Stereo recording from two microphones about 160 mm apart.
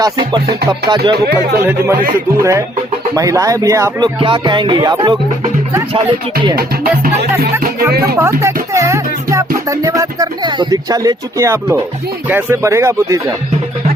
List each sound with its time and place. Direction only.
0.0 s speech: 30° right (ahead or behind)
4.2 s speech: 30° right (ahead or behind)
6.6 s music: 70° right (ahead or behind)
8.1 s speech: 20° right (ahead or behind)
8.7 s music: 20° right (ahead or behind)
9.6 s speech: 20° right (ahead or behind)